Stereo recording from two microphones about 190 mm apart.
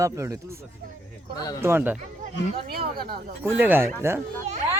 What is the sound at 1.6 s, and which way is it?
Speech, 10° right (ahead or behind).